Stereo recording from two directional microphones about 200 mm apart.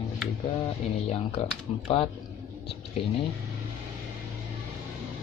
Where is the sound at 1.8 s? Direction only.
30° left (ahead or behind).